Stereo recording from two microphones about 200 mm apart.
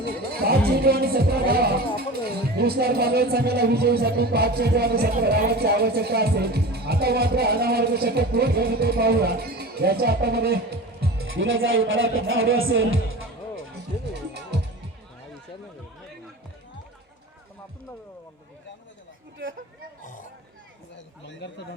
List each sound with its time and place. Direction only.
0.0 s speech: 50° right (ahead or behind)
11.3 s speech: 75° right (ahead or behind)